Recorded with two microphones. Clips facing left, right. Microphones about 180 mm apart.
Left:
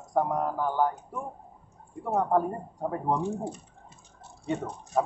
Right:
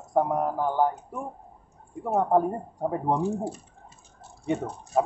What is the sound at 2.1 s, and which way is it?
Speech, 15° right (ahead or behind).